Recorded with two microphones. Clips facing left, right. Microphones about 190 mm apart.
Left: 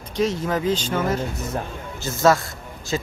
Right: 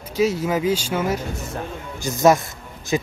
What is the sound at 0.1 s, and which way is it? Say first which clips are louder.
Speech: right 2 dB; 10° right (ahead or behind).